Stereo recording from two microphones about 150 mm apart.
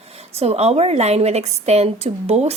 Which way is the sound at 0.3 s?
45° right (ahead or behind).